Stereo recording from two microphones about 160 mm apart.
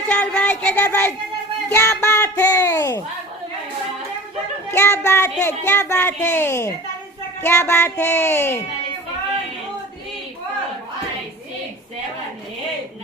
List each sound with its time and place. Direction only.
0.1 s a sound: 5° left (ahead or behind)
1.7 s speech: 15° left (ahead or behind)
4.7 s speech: 15° left (ahead or behind)